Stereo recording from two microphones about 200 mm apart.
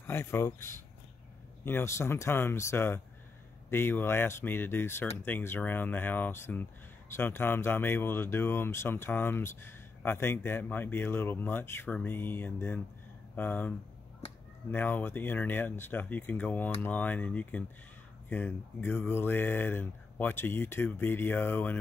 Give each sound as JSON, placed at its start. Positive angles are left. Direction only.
{"t": 0.0, "sound": "speech", "side_deg": 10}